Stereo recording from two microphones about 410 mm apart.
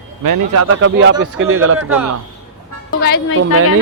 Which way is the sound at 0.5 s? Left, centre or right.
Right.